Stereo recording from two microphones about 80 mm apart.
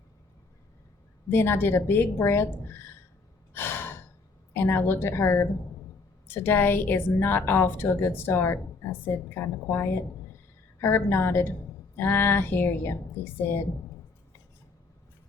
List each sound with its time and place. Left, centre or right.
1.3 s a woman's voice: left
3.5 s sigh: left
4.5 s a woman's voice: left